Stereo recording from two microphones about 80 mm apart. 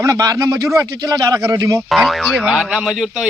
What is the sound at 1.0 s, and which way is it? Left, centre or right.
Speech, right.